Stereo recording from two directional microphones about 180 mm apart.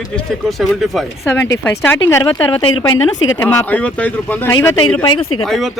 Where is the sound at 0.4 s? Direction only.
Centre (ahead or behind).